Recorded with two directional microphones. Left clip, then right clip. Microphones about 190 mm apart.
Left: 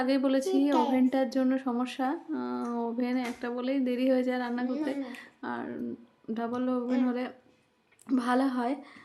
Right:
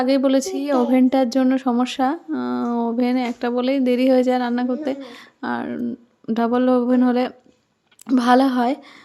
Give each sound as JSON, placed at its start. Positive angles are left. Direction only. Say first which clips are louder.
{"t": 0.0, "sound": "speech", "louder": "right 9 dB", "side_deg": -35}